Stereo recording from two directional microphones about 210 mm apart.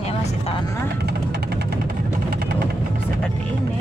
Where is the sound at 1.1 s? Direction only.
50° right (ahead or behind).